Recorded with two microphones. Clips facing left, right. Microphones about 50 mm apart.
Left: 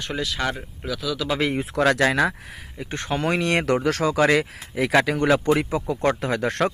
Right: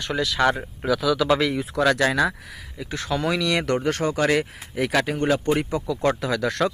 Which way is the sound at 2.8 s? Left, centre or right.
Left.